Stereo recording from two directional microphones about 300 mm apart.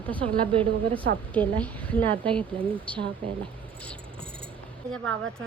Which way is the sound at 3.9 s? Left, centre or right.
Centre.